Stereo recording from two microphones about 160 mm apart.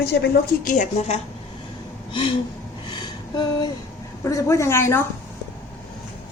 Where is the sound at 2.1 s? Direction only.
30° left (ahead or behind).